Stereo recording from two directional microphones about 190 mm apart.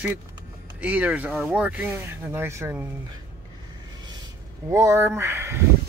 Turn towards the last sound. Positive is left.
turn(degrees=-15)  # may be behind; listen again after turning